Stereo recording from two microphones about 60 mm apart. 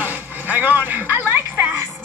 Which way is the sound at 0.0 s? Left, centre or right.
Right.